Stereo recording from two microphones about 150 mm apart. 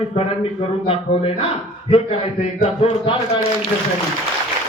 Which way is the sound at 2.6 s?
45° left (ahead or behind).